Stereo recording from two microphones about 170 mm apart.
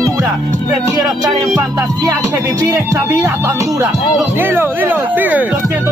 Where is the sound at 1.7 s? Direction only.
20° right (ahead or behind).